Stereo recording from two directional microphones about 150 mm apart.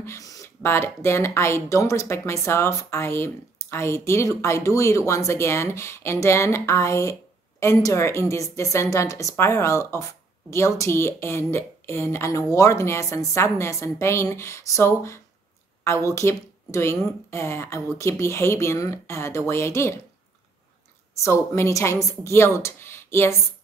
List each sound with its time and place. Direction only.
0.0 s a woman's voice: 20° left (ahead or behind)
21.2 s speech: 20° left (ahead or behind)